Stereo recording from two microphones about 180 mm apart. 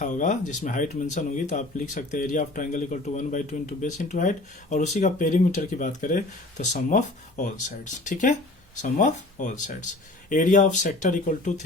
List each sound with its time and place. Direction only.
0.0 s speech: 45° left (ahead or behind)